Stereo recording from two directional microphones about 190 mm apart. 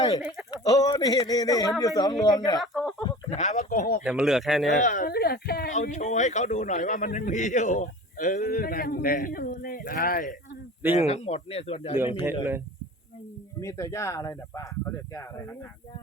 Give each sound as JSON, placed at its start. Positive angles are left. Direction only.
{"t": 0.5, "sound": "speech", "side_deg": 20}
{"t": 2.6, "sound": "speech", "side_deg": 0}
{"t": 3.2, "sound": "a man's voice", "side_deg": 35}
{"t": 4.0, "sound": "speech", "side_deg": -5}
{"t": 4.8, "sound": "speech", "side_deg": 40}
{"t": 5.7, "sound": "a man's voice", "side_deg": 40}
{"t": 10.9, "sound": "a man's voice", "side_deg": 35}
{"t": 12.2, "sound": "speech", "side_deg": -10}
{"t": 13.6, "sound": "speech", "side_deg": 15}